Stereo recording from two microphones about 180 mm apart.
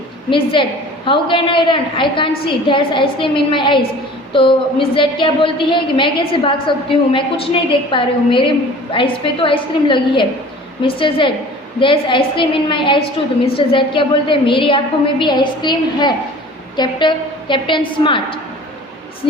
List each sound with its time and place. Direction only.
0.3 s a woman's voice: 30° left (ahead or behind)